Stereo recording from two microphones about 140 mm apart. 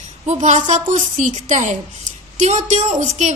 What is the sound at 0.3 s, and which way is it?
A woman's voice, 60° right (ahead or behind).